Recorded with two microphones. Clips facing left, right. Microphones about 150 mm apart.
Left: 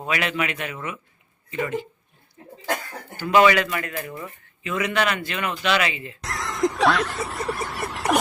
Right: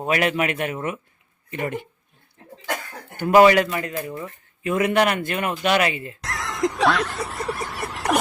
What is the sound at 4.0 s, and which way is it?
Speech, 10° right (ahead or behind).